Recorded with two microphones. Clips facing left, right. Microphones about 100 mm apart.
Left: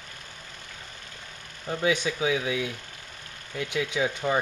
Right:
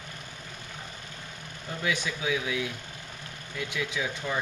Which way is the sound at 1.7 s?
30° left (ahead or behind).